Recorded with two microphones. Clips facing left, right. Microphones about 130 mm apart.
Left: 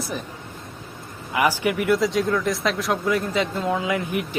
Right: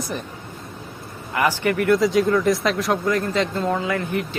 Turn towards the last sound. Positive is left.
turn(degrees=15)  # may be behind; listen again after turning